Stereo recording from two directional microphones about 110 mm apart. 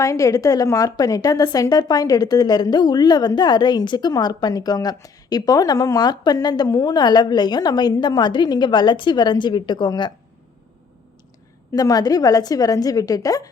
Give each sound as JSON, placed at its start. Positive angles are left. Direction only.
{"t": 0.0, "sound": "a woman's voice", "side_deg": 30}
{"t": 11.7, "sound": "a woman's voice", "side_deg": 35}